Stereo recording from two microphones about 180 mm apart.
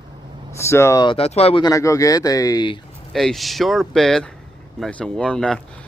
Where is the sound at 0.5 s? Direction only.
15° left (ahead or behind).